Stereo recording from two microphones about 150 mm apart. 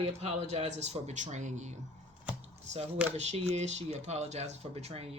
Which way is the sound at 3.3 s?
45° right (ahead or behind).